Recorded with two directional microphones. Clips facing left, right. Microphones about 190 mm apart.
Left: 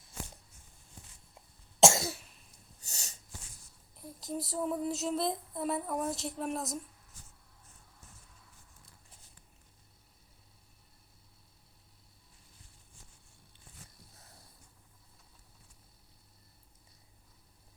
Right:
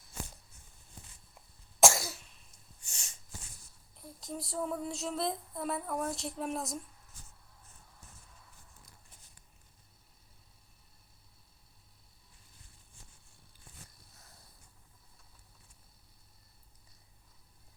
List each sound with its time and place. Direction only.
1.8 s cough: 25° left (ahead or behind)
2.8 s snort: 40° left (ahead or behind)
3.9 s child singing: centre (ahead or behind)